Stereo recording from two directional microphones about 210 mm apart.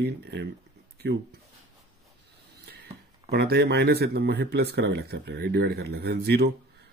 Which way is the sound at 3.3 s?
50° right (ahead or behind).